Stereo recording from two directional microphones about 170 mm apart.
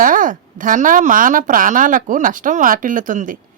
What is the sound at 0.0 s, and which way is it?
Speech, 50° right (ahead or behind).